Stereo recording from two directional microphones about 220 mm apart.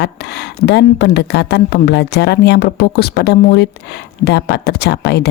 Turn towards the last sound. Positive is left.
turn(degrees=50)  # may be behind; listen again after turning